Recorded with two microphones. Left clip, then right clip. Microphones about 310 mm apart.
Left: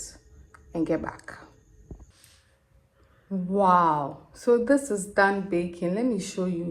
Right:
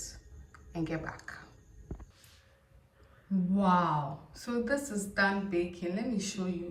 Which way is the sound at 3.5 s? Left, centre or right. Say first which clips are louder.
Left 9 dB; centre.